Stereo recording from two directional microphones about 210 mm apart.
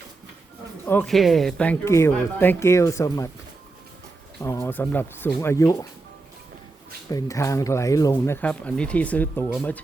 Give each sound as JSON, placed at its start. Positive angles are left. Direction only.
{"t": 0.9, "sound": "speech", "side_deg": 5}
{"t": 4.4, "sound": "speech", "side_deg": 10}
{"t": 7.1, "sound": "speech", "side_deg": 15}